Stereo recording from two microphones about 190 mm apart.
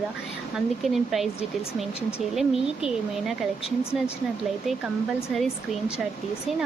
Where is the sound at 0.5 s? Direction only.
Centre (ahead or behind).